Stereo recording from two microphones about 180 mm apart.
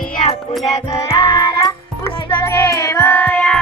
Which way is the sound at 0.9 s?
30° left (ahead or behind).